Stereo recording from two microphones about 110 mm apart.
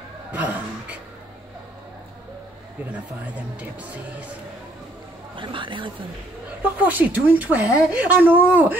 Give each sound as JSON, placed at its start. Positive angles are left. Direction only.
{"t": 0.3, "sound": "speech", "side_deg": -15}
{"t": 2.9, "sound": "speech", "side_deg": -15}
{"t": 5.3, "sound": "speech", "side_deg": -50}
{"t": 6.6, "sound": "speech", "side_deg": -15}